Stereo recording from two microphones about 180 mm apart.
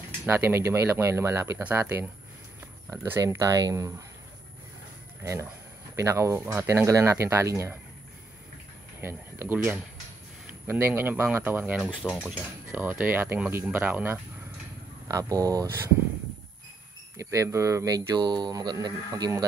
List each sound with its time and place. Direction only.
0.3 s speech: 15° right (ahead or behind)
5.2 s speech: 15° right (ahead or behind)
9.0 s speech: 10° right (ahead or behind)
17.2 s speech: 15° right (ahead or behind)